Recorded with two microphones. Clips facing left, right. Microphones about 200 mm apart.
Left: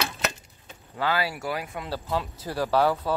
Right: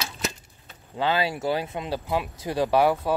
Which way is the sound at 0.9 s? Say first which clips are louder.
Right 2 dB; 20° right (ahead or behind).